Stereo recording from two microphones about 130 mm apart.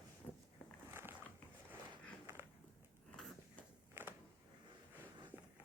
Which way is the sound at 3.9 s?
20° right (ahead or behind).